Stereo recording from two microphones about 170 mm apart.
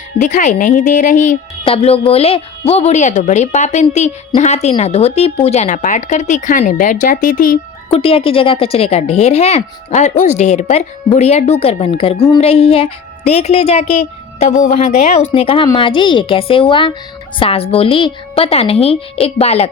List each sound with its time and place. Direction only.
0.2 s speech: 45° left (ahead or behind)
1.6 s a woman's voice: 35° left (ahead or behind); by 7.6 s 55° left (ahead or behind)
7.9 s a woman's voice: 35° left (ahead or behind)